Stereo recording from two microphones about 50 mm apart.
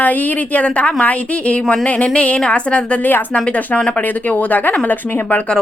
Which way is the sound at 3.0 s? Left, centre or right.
Left.